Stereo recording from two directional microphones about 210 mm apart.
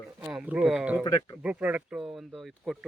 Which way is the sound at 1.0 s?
15° left (ahead or behind).